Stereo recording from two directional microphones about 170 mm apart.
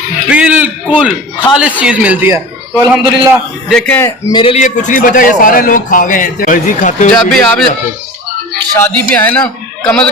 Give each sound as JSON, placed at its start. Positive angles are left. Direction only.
{"t": 0.3, "sound": "a sound", "side_deg": -5}
{"t": 1.5, "sound": "a man's voice", "side_deg": -5}
{"t": 3.3, "sound": "speech", "side_deg": 5}
{"t": 4.3, "sound": "a man's voice", "side_deg": 25}
{"t": 4.5, "sound": "speech", "side_deg": 45}
{"t": 7.2, "sound": "speech", "side_deg": 5}